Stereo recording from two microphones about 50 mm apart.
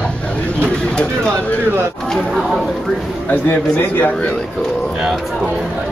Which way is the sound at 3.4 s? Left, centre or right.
Left.